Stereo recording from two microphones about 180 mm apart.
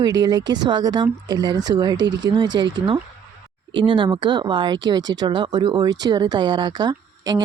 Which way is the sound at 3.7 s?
25° right (ahead or behind).